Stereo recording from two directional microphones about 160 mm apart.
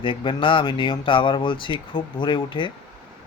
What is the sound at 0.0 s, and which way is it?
Speech, 30° left (ahead or behind).